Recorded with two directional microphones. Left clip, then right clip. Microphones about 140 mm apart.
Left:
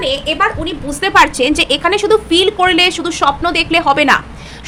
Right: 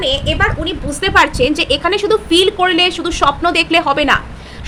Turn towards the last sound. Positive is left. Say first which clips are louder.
# left 2 dB
turn(degrees=10)  # may be behind; listen again after turning